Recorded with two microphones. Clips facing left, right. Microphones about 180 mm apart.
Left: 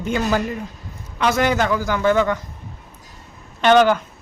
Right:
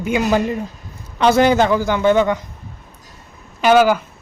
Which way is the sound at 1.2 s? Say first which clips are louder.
Right 5 dB; 30° right (ahead or behind).